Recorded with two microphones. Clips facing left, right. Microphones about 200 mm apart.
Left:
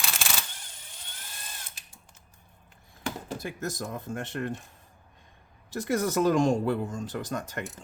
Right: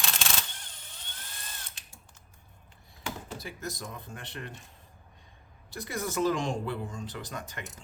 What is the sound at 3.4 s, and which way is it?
Speech, 50° left (ahead or behind).